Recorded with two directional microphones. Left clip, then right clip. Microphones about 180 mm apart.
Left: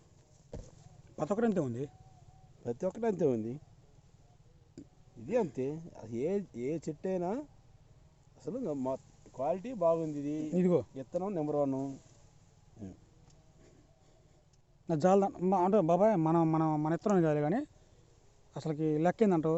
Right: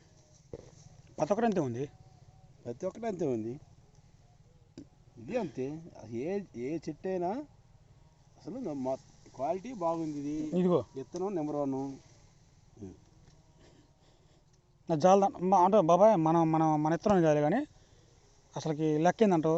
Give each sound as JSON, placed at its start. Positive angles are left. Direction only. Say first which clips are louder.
{"t": 1.1, "sound": "speech", "louder": "right 3 dB", "side_deg": 0}
{"t": 2.6, "sound": "speech", "louder": "left 3 dB", "side_deg": 90}
{"t": 5.2, "sound": "speech", "louder": "left 3 dB", "side_deg": 55}
{"t": 10.5, "sound": "a man's voice", "louder": "right 1 dB", "side_deg": 15}
{"t": 10.9, "sound": "speech", "louder": "even", "side_deg": 50}
{"t": 14.8, "sound": "a man's voice", "louder": "right 3 dB", "side_deg": 10}